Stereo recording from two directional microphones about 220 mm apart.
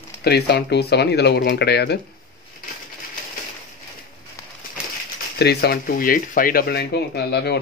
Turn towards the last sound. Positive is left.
turn(degrees=45)  # may be behind; listen again after turning